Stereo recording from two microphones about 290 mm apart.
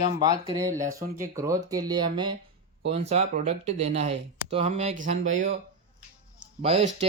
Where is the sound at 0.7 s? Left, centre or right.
Right.